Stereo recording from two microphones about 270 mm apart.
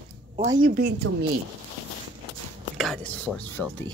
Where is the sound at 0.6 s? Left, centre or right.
Right.